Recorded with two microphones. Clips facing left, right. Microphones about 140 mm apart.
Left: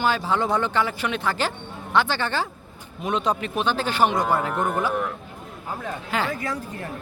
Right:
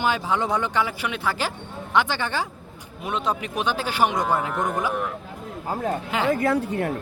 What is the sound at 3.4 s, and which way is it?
Speech, 15° right (ahead or behind).